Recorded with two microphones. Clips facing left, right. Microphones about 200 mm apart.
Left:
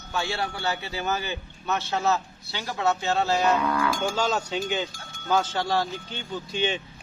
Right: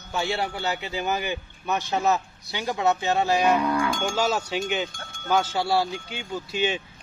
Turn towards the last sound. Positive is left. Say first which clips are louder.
# right 1 dB
turn(degrees=-10)  # may be behind; listen again after turning